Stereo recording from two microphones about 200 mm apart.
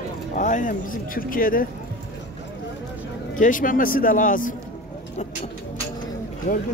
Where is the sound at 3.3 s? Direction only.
40° left (ahead or behind).